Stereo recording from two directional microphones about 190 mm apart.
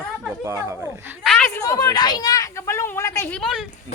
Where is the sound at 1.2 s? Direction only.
5° left (ahead or behind).